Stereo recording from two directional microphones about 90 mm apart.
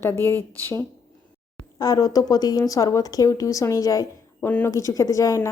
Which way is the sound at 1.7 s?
45° left (ahead or behind).